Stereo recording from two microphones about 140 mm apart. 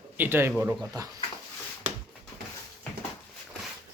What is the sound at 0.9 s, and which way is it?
Speech, 30° right (ahead or behind).